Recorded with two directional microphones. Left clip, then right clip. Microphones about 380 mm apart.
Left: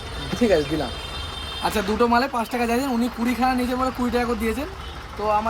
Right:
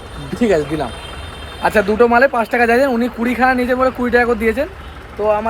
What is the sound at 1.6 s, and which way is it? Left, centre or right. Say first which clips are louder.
Speech: right 9 dB; centre.